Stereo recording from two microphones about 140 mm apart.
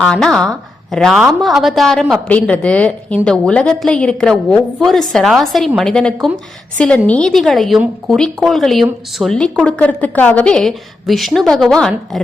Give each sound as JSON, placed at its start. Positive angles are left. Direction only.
{"t": 0.0, "sound": "a woman's voice", "side_deg": 5}